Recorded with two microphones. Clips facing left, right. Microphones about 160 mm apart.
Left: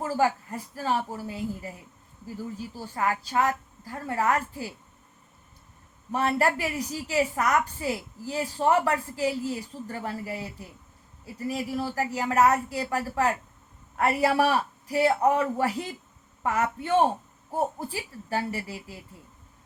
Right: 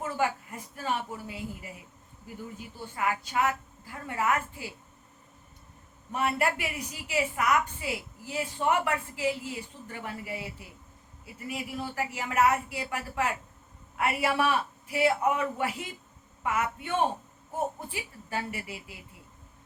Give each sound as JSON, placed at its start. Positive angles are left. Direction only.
{"t": 0.0, "sound": "a woman's voice", "side_deg": 40}
{"t": 6.1, "sound": "a woman's voice", "side_deg": 35}